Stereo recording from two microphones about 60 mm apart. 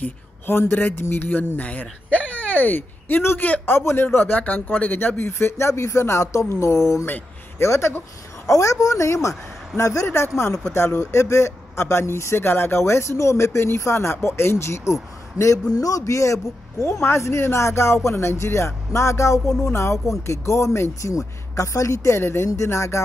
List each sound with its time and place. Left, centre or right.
0.0 s speech: left
1.6 s a man's voice: left
3.7 s speech: left
8.5 s a woman's voice: left
10.0 s speech: left
15.7 s a man's voice: left
17.0 s speech: left